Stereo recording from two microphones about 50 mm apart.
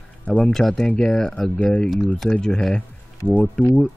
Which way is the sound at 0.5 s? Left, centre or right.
Centre.